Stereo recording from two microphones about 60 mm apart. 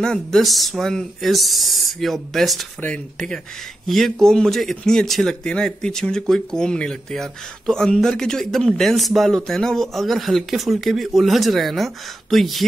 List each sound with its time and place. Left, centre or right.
0.0 s speech: centre
3.8 s speech: centre